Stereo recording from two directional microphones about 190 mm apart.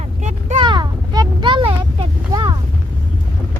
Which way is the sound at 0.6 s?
25° right (ahead or behind).